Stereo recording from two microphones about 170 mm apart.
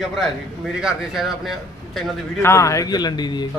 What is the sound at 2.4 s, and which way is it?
A man's voice, 15° left (ahead or behind).